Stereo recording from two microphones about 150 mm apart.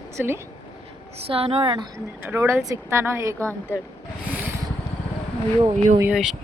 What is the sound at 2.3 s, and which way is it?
A woman's voice, 15° right (ahead or behind).